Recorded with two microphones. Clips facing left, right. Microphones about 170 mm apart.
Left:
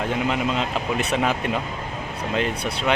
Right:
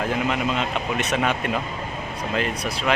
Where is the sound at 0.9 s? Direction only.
30° left (ahead or behind).